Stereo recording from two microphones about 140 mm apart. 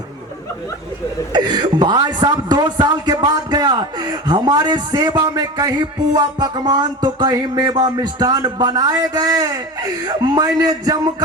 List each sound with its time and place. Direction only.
1.3 s a man's voice: 30° right (ahead or behind)